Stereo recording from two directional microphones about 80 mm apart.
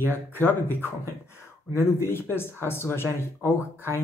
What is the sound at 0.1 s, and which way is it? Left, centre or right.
Speech, left.